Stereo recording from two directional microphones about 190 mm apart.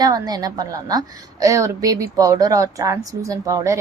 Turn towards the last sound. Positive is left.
turn(degrees=-15)  # may be behind; listen again after turning